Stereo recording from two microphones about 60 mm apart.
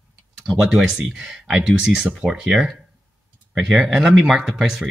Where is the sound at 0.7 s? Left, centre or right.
Centre.